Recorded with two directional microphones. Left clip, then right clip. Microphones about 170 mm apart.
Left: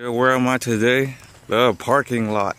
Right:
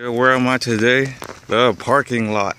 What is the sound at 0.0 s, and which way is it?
Speech, 5° left (ahead or behind).